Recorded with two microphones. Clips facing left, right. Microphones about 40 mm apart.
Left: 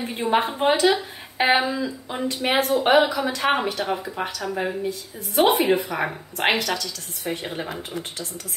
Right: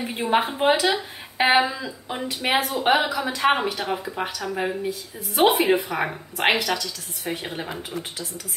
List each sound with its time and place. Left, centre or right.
0.0 s a woman's voice: centre